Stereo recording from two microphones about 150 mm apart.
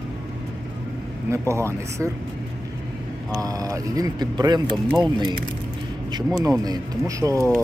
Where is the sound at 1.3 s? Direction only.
20° right (ahead or behind).